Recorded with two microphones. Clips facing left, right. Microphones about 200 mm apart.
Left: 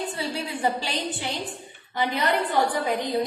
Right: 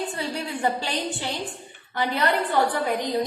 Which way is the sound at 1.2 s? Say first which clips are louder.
Right 1 dB; 15° left (ahead or behind).